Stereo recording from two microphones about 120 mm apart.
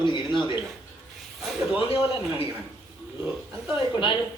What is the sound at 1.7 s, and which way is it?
Speech, 55° left (ahead or behind).